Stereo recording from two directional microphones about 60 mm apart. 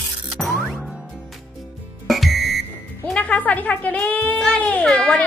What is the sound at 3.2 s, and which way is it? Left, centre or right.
A woman's voice, left.